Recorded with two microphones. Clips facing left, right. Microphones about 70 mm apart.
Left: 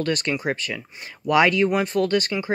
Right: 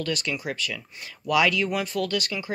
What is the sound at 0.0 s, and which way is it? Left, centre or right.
Speech, left.